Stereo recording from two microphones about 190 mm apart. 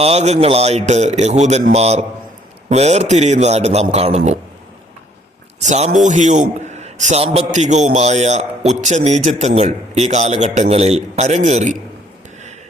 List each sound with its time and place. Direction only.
0.0 s a man's voice: 35° right (ahead or behind)
5.6 s a man's voice: 35° right (ahead or behind)